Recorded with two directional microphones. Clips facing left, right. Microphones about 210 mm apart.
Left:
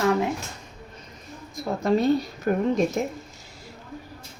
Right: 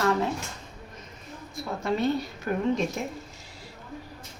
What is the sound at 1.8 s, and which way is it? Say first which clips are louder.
Speech: left 5 dB; 35° left (ahead or behind).